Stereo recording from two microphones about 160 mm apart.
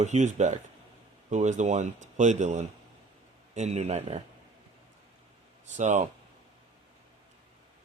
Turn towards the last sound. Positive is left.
turn(degrees=-45)  # may be behind; listen again after turning